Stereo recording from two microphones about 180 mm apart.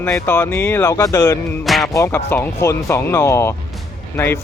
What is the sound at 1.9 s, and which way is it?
Speech, 15° left (ahead or behind).